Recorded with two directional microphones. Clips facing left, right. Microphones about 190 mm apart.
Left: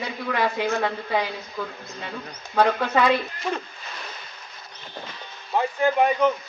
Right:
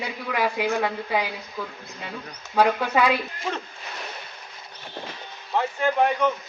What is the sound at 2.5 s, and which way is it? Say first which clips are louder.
Speech: even; 10° right (ahead or behind).